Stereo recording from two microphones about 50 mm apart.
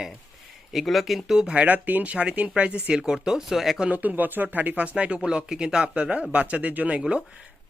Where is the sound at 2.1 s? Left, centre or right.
Right; by 3.7 s centre.